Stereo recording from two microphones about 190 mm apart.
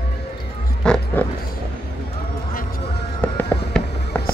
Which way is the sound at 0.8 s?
5° left (ahead or behind).